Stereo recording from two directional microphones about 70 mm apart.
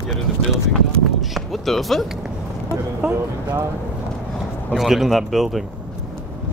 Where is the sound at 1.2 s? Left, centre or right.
Centre.